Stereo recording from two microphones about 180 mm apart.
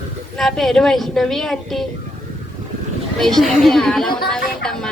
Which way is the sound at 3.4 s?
Centre (ahead or behind).